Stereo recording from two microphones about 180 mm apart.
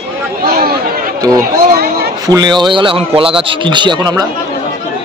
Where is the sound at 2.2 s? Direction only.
20° right (ahead or behind).